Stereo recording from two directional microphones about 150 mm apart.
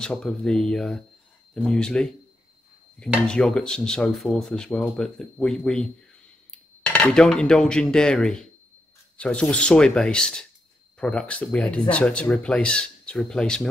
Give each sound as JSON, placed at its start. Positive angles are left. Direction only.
{"t": 0.0, "sound": "speech", "side_deg": 5}
{"t": 3.3, "sound": "speech", "side_deg": 5}